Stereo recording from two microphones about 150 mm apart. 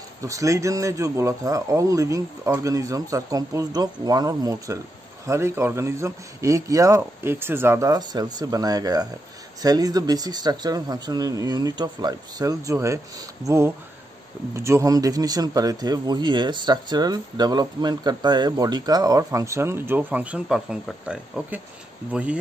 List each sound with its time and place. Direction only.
0.2 s speech: 20° right (ahead or behind)